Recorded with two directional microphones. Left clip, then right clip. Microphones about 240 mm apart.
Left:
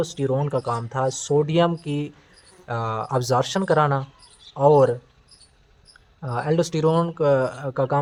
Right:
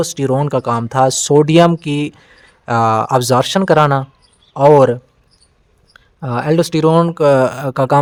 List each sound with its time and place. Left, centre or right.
0.0 s speech: right